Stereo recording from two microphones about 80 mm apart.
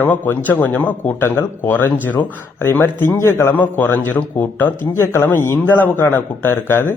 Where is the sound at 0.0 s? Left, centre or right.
Left.